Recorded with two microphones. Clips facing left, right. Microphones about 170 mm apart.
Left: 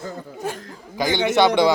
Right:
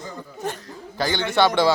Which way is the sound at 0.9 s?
15° left (ahead or behind).